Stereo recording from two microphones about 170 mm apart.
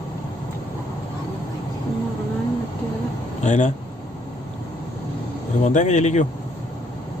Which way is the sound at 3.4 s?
45° left (ahead or behind).